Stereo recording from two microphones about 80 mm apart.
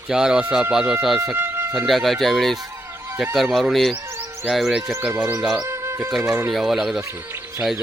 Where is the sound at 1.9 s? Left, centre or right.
Centre.